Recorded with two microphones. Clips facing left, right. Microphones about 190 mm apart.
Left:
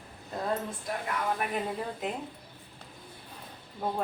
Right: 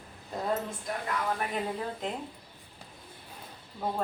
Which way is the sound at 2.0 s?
5° left (ahead or behind).